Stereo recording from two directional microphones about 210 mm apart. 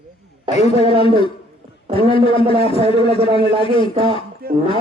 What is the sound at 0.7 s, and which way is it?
Speech, 25° right (ahead or behind).